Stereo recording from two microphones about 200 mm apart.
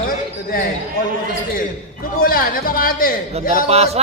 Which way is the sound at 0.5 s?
45° left (ahead or behind).